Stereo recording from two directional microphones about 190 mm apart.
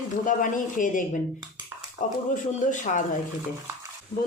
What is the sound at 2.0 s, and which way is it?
Speech, 40° left (ahead or behind).